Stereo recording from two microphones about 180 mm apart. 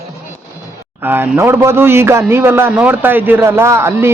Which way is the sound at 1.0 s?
10° right (ahead or behind).